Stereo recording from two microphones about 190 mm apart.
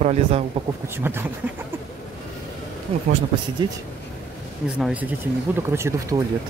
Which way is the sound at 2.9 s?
30° right (ahead or behind).